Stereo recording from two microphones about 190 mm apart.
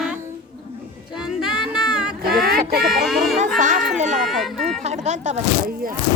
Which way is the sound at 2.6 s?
55° right (ahead or behind).